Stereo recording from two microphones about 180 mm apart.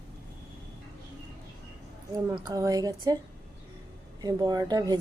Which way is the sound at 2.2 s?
20° right (ahead or behind).